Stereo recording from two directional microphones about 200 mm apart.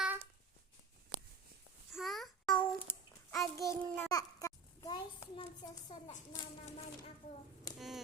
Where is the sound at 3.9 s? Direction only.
15° left (ahead or behind).